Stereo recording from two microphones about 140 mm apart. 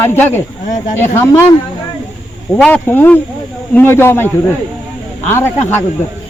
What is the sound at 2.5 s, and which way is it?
Speech, 10° left (ahead or behind).